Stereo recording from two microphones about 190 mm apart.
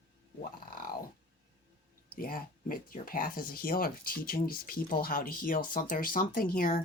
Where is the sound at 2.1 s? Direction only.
50° left (ahead or behind).